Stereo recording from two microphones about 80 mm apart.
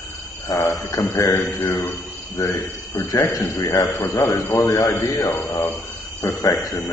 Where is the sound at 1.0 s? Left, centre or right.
Left.